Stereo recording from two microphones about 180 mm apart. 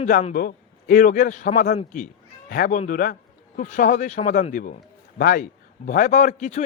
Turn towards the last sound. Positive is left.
turn(degrees=40)  # may be behind; listen again after turning